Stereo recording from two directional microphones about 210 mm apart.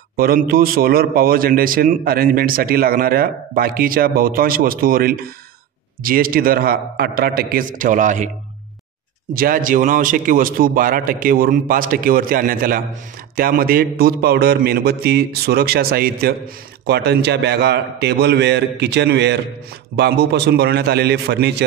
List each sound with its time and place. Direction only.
0.1 s a man's voice: 45° right (ahead or behind)
9.3 s a man's voice: 40° right (ahead or behind)